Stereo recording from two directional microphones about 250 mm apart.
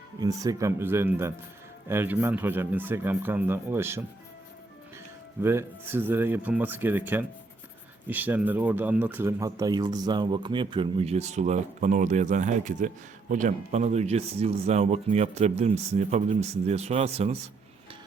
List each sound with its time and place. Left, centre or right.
0.2 s speech: centre
5.4 s speech: centre